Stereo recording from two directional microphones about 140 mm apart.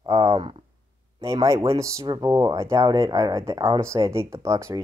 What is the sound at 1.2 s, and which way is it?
Speech, 20° right (ahead or behind).